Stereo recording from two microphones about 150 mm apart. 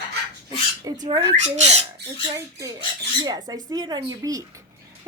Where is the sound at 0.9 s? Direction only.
25° right (ahead or behind).